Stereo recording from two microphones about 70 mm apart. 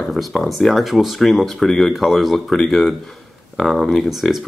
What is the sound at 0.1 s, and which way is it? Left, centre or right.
Speech, centre.